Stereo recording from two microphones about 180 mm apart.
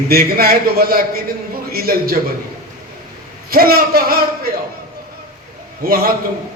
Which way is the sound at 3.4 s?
55° right (ahead or behind).